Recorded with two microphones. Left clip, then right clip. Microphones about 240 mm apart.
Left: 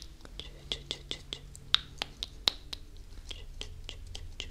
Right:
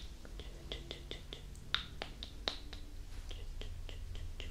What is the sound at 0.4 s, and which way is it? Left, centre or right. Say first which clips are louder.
Whispering: left 9 dB; left.